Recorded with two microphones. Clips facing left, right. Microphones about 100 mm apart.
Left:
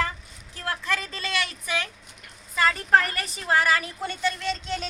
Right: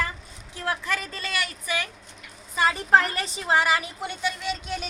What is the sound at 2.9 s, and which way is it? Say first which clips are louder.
A woman's voice: right 1 dB; 25° right (ahead or behind).